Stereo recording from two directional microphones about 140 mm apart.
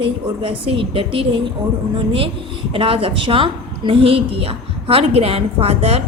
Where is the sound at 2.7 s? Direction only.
40° right (ahead or behind).